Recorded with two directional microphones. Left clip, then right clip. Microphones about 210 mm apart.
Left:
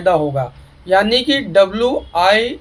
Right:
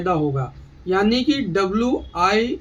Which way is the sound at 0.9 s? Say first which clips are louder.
Left 6 dB; 5° right (ahead or behind).